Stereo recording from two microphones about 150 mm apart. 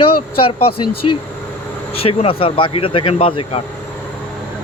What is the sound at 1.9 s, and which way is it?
Speech, 40° left (ahead or behind).